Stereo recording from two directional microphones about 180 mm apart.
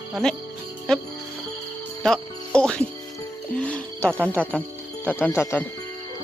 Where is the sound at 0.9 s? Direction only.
5° left (ahead or behind).